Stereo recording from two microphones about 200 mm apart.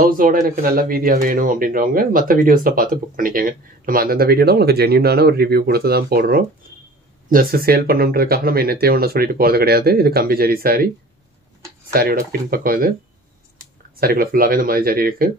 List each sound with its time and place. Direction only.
0.0 s speech: 45° right (ahead or behind)
11.9 s speech: 50° right (ahead or behind)
13.9 s speech: 50° right (ahead or behind)